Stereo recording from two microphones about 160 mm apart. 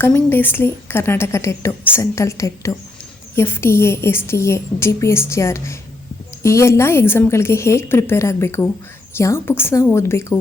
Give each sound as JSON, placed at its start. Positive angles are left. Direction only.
{"t": 0.0, "sound": "a woman's voice", "side_deg": 15}